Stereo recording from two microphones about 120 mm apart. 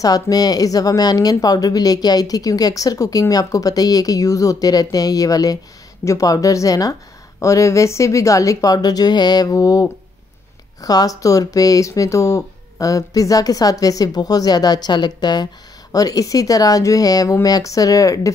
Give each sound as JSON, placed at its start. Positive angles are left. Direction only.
{"t": 0.0, "sound": "speech", "side_deg": 30}